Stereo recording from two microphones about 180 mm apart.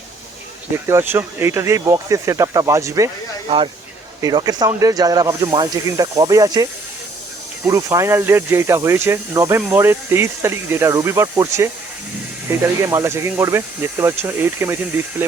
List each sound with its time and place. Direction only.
0.9 s speech: 15° right (ahead or behind)
4.2 s speech: 20° right (ahead or behind)
7.7 s speech: 15° right (ahead or behind)